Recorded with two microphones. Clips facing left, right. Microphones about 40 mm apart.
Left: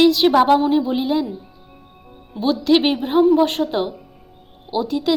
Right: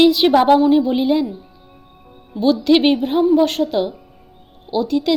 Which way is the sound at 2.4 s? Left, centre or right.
Centre.